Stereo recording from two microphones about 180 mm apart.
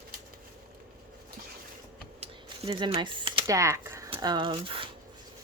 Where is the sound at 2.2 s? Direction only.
30° right (ahead or behind).